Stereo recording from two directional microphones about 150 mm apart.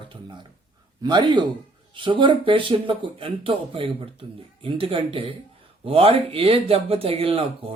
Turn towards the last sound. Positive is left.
turn(degrees=-40)  # may be behind; listen again after turning